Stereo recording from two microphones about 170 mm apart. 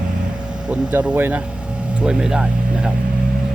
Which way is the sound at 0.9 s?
10° right (ahead or behind).